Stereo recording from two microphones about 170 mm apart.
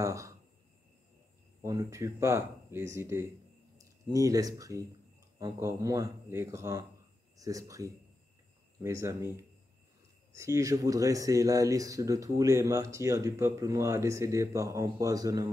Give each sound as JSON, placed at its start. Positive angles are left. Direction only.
{"t": 0.0, "sound": "speech", "side_deg": -20}
{"t": 1.6, "sound": "speech", "side_deg": -20}
{"t": 10.3, "sound": "speech", "side_deg": -15}